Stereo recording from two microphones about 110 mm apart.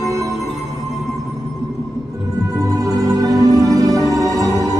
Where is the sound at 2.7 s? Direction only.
30° right (ahead or behind).